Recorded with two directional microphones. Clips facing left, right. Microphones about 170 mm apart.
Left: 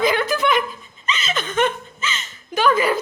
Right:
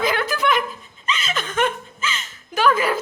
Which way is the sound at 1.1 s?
5° right (ahead or behind).